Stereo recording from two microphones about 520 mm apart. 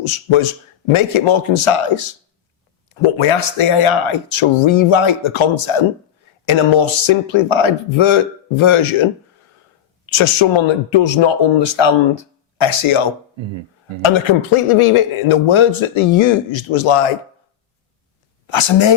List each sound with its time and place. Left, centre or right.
0.0 s a man's voice: left
10.1 s speech: left
18.4 s speech: left